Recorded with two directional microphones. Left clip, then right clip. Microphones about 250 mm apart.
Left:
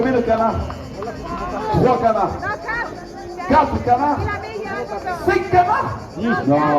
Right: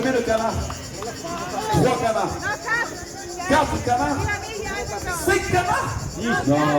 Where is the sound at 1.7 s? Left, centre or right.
Right.